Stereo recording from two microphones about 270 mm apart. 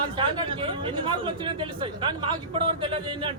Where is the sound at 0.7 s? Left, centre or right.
Centre.